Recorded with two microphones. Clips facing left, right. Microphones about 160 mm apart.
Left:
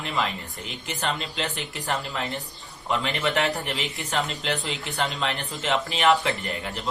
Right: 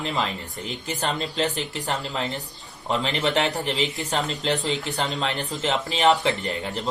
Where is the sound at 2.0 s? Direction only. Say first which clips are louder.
Right 2 dB; 30° right (ahead or behind).